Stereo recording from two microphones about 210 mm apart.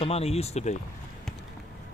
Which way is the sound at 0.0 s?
30° left (ahead or behind).